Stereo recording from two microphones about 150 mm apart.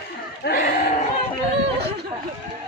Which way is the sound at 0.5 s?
90° left.